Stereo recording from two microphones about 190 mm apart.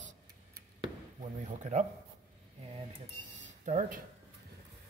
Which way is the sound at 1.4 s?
40° right (ahead or behind).